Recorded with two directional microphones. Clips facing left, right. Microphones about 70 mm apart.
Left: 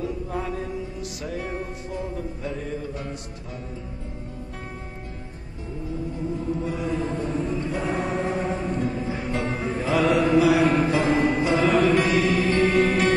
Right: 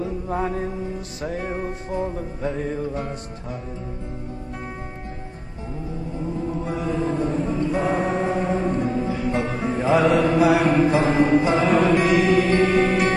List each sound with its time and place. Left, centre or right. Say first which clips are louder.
0.0 s mantra: right 4 dB; right
1.2 s music: right 4 dB; right
7.7 s music: right 5 dB; right